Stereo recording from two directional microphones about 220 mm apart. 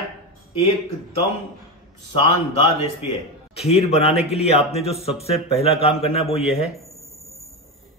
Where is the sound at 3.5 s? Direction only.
30° left (ahead or behind).